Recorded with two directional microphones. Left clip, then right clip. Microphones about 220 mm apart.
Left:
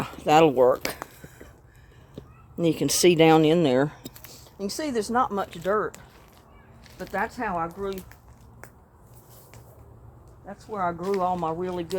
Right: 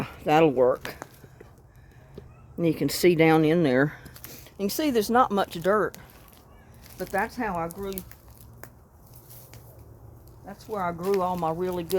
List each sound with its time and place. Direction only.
0.0 s speech: centre (ahead or behind)
2.6 s speech: 5° left (ahead or behind)
3.8 s a sound: 10° right (ahead or behind)
4.3 s speech: 35° right (ahead or behind); by 5.9 s 55° right (ahead or behind)
7.1 s speech: 40° right (ahead or behind)
10.4 s speech: 35° right (ahead or behind)